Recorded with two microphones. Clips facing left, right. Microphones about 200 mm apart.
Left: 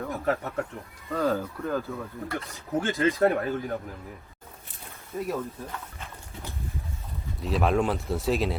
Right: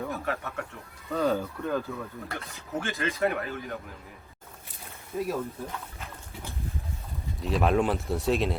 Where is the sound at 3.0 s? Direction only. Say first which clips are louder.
Left 5 dB; 40° left (ahead or behind).